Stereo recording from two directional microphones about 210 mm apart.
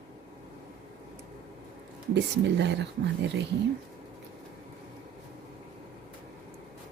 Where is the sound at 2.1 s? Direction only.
55° right (ahead or behind).